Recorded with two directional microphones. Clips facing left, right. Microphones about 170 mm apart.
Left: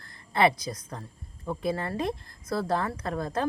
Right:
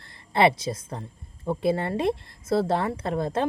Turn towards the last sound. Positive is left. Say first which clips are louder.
# right 4 dB
turn(degrees=-25)  # may be behind; listen again after turning